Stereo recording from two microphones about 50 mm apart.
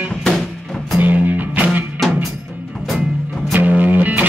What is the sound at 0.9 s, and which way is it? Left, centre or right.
Music, right.